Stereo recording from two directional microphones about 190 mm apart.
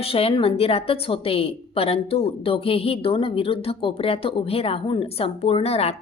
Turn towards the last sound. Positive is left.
turn(degrees=30)  # may be behind; listen again after turning